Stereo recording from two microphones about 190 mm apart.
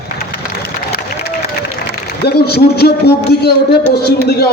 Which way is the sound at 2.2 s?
55° left (ahead or behind).